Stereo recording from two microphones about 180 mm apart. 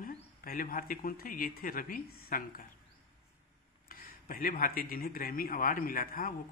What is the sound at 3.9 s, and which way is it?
Speech, 50° left (ahead or behind).